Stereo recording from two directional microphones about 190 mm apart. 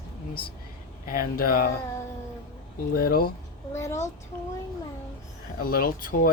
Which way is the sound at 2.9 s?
50° left (ahead or behind).